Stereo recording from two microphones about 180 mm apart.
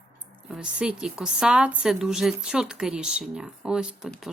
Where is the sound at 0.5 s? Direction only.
5° right (ahead or behind).